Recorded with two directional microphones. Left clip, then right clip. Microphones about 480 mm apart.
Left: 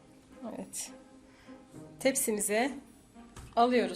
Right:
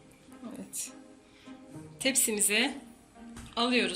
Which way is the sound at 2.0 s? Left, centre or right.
Centre.